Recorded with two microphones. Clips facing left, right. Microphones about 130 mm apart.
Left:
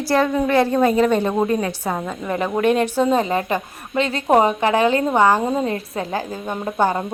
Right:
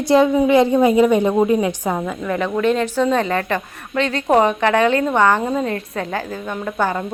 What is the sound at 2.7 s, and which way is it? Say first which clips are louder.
A woman's voice: left 1 dB; 15° left (ahead or behind).